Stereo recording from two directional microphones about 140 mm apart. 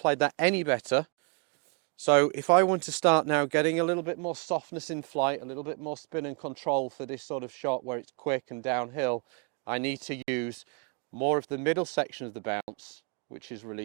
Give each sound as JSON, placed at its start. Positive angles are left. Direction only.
{"t": 0.0, "sound": "speech", "side_deg": -20}
{"t": 2.0, "sound": "speech", "side_deg": -20}